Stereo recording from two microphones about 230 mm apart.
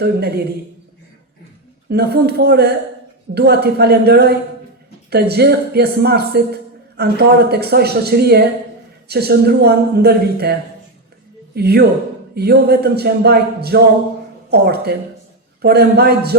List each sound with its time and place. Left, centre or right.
0.0 s a man's voice: right
1.9 s a man's voice: right
11.5 s a man's voice: right